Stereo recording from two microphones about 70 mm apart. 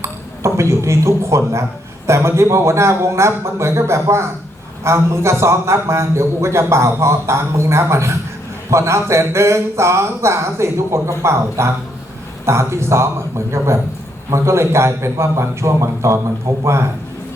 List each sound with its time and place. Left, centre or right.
0.0 s a man's voice: right